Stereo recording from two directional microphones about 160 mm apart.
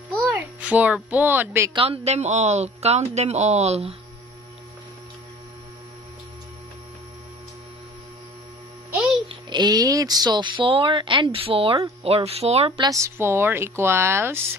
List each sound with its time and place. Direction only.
0.2 s a child's voice: 10° right (ahead or behind)
1.7 s speech: 35° right (ahead or behind)
9.3 s speech: 25° right (ahead or behind)
12.9 s a woman's voice: 15° right (ahead or behind)